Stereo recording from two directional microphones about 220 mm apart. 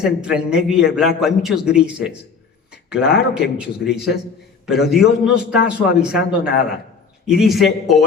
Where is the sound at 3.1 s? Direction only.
45° left (ahead or behind).